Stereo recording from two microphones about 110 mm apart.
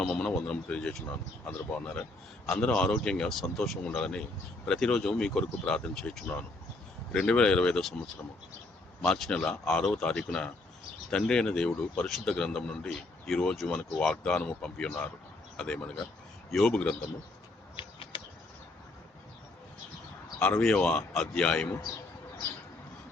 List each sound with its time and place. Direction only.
0.0 s speech: 5° left (ahead or behind)
17.7 s a sound: 50° left (ahead or behind)
20.4 s speech: 5° left (ahead or behind)